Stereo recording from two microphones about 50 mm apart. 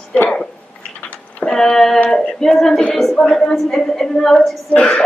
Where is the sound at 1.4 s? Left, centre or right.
Centre.